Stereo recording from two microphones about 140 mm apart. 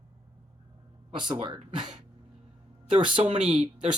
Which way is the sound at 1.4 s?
35° right (ahead or behind).